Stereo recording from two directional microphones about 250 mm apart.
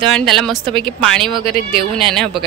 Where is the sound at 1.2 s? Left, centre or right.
Centre.